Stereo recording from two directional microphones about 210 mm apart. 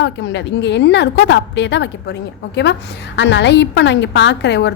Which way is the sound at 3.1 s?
60° left (ahead or behind).